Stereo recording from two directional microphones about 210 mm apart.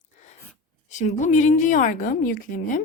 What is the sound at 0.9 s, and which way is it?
A woman's voice, 35° left (ahead or behind).